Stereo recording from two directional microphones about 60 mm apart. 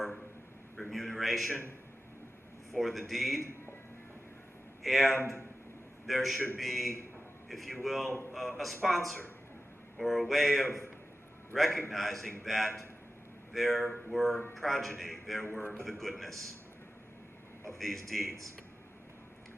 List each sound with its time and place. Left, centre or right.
0.8 s a sound: centre
2.7 s speech: centre
4.8 s speech: centre
5.1 s a man's voice: right
6.1 s speech: centre
17.7 s speech: centre